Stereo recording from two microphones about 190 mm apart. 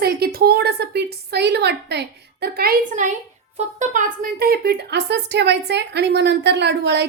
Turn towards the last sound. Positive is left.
turn(degrees=-60)  # may be behind; listen again after turning